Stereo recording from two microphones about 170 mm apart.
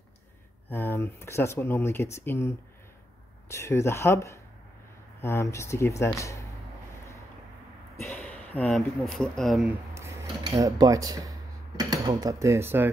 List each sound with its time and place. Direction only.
0.7 s speech: 15° left (ahead or behind)
7.9 s speech: 15° left (ahead or behind)
9.9 s a sound: 15° right (ahead or behind)